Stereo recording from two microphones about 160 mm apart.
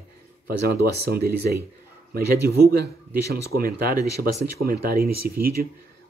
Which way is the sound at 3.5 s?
65° right (ahead or behind).